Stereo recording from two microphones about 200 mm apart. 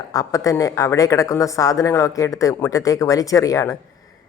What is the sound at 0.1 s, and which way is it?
A man's voice, 15° left (ahead or behind).